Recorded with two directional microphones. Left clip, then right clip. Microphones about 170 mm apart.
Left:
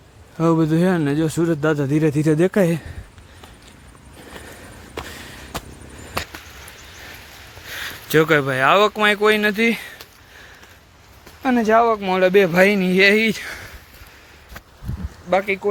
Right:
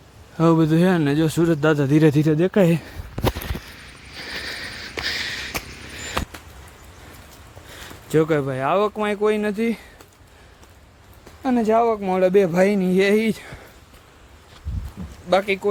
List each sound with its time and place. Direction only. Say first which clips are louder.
0.3 s speech: even; 5° right (ahead or behind)
2.2 s speech: left 2 dB; 5° left (ahead or behind)
2.6 s speech: even; 10° right (ahead or behind)
4.2 s a sound: right 9 dB; centre (ahead or behind)
7.7 s speech: left 3 dB; 5° right (ahead or behind)
11.4 s speech: left 3 dB; 10° left (ahead or behind); by 13.7 s 5° right (ahead or behind)
15.3 s speech: even; 15° right (ahead or behind)